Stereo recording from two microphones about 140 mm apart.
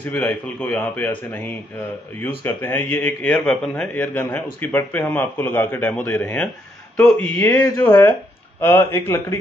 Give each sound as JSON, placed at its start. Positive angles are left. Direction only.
{"t": 0.1, "sound": "a man's voice", "side_deg": 15}
{"t": 7.5, "sound": "a man's voice", "side_deg": 25}